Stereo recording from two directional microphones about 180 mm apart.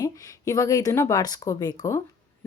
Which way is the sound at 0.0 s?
20° left (ahead or behind).